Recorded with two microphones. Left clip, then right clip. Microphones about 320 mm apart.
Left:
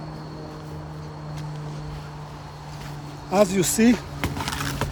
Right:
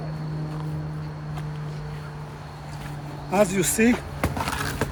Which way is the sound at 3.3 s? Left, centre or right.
Left.